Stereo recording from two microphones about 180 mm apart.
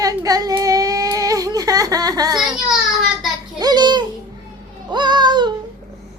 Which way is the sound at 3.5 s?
25° right (ahead or behind).